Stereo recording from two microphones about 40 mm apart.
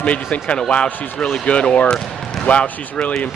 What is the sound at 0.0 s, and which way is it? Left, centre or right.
Speech, left.